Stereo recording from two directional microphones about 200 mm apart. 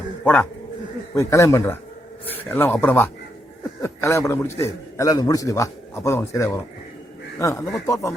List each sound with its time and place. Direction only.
1.1 s a man's voice: 15° left (ahead or behind)